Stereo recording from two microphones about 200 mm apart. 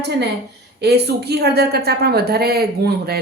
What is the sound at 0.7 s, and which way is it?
A woman's voice, 55° right (ahead or behind).